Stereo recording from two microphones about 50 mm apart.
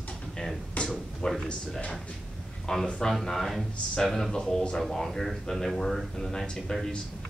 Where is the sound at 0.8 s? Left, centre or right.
Left.